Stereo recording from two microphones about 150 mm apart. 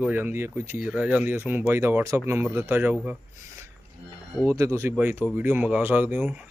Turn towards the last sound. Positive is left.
turn(degrees=-10)  # may be behind; listen again after turning